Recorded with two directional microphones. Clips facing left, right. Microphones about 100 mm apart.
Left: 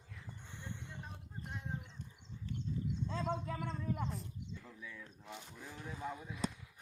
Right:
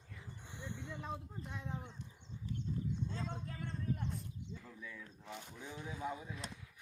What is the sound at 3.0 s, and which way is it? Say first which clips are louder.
Speech: left 5 dB; 90° left.